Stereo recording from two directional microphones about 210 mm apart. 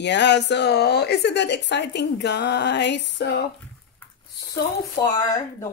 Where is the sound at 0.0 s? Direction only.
55° left (ahead or behind).